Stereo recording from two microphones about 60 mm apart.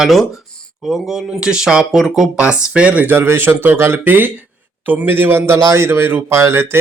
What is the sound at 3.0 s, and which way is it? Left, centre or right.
Speech, right.